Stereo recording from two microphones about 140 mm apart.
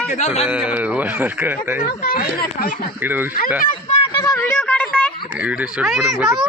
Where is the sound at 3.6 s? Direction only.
50° left (ahead or behind).